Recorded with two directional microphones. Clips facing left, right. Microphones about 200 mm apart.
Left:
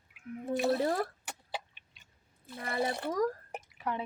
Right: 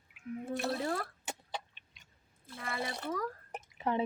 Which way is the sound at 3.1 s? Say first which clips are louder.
Left 7 dB; 40° left (ahead or behind).